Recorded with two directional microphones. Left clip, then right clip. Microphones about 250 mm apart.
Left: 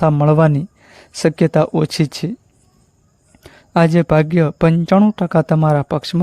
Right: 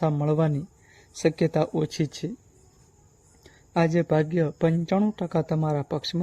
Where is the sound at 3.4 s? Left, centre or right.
Left.